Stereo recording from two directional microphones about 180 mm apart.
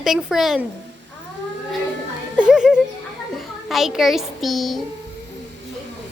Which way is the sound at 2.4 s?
5° right (ahead or behind).